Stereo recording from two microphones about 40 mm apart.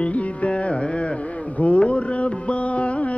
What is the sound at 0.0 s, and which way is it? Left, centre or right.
Music, left.